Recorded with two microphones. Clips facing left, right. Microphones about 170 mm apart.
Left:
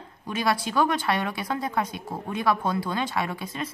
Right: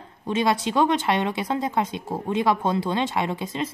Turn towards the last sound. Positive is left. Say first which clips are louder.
# right 4 dB
turn(degrees=-25)  # may be behind; listen again after turning